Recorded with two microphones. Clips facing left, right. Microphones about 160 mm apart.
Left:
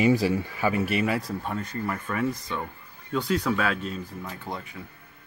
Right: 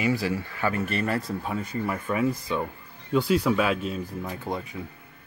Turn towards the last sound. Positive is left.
turn(degrees=-15)  # may be behind; listen again after turning